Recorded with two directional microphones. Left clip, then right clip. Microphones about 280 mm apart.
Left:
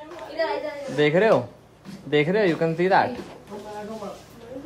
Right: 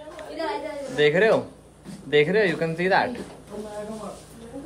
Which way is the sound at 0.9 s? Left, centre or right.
Centre.